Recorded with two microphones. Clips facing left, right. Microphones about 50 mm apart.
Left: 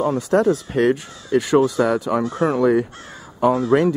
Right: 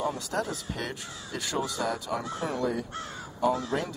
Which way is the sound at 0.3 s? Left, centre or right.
Left.